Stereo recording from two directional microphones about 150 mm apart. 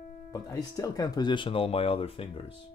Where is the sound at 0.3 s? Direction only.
25° left (ahead or behind).